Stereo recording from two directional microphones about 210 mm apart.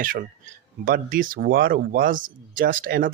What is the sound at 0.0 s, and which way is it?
Speech, 40° right (ahead or behind).